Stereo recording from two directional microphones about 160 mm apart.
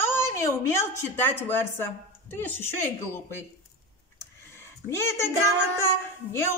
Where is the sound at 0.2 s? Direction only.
15° left (ahead or behind).